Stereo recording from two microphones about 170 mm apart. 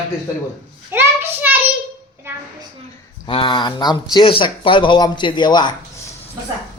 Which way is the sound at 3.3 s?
30° left (ahead or behind).